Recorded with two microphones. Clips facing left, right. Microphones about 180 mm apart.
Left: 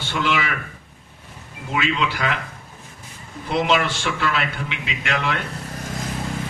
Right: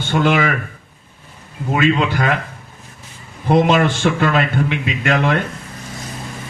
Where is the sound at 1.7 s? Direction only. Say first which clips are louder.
Right 7 dB; 50° right (ahead or behind).